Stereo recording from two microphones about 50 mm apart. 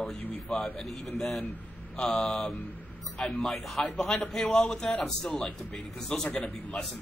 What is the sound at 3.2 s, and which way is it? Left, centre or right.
A man's voice, centre.